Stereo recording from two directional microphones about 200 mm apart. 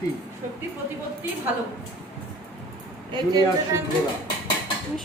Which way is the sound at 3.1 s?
20° right (ahead or behind).